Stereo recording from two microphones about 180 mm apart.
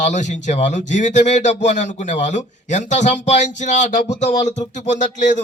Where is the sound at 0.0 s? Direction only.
40° left (ahead or behind).